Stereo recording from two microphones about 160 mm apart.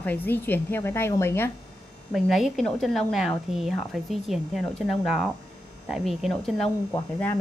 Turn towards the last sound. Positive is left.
turn(degrees=10)  # may be behind; listen again after turning